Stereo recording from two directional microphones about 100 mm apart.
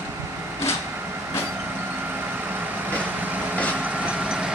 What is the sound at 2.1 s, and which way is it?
Vehicle, 20° right (ahead or behind).